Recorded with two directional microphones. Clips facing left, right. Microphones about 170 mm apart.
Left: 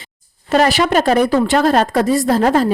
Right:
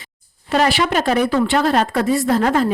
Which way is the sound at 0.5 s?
40° left (ahead or behind).